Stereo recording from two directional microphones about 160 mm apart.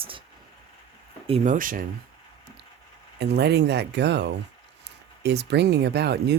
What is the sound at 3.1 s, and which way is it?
Speech, 90° right.